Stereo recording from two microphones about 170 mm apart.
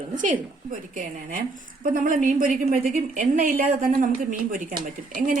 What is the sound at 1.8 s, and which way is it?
A woman's voice, 55° right (ahead or behind).